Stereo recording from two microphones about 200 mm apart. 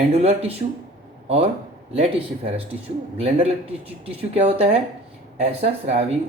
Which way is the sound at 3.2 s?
30° right (ahead or behind).